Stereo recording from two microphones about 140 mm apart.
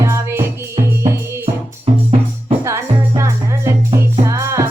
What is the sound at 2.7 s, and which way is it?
Music, 20° right (ahead or behind).